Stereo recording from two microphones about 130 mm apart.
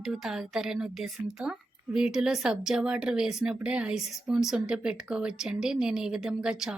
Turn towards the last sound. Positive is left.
turn(degrees=-5)  # may be behind; listen again after turning